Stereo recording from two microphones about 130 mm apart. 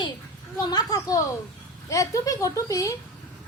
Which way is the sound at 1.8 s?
25° left (ahead or behind).